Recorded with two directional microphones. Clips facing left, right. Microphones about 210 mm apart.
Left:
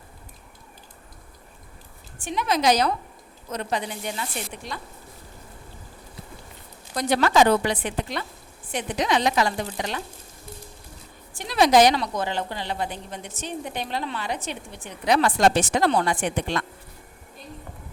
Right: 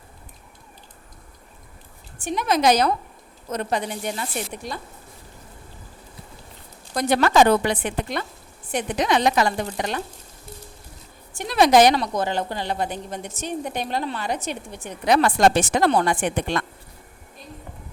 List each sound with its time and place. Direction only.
2.2 s a woman's voice: 45° right (ahead or behind)
6.9 s a woman's voice: 55° right (ahead or behind)
11.3 s a woman's voice: 55° right (ahead or behind)